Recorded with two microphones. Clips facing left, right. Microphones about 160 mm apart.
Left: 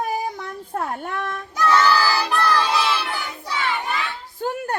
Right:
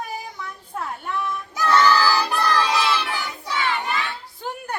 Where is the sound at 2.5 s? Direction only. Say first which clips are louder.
Even; 10° left (ahead or behind).